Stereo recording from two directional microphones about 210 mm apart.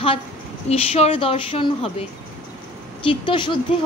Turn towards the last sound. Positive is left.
turn(degrees=25)  # may be behind; listen again after turning